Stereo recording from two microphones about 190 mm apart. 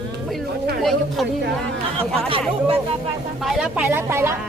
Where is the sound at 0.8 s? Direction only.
Centre (ahead or behind).